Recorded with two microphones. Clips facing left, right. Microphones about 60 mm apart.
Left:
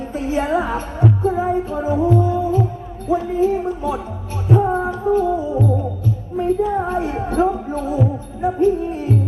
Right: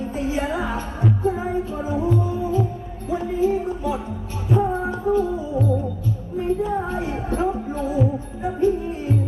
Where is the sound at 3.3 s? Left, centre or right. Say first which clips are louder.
Right 1 dB; left.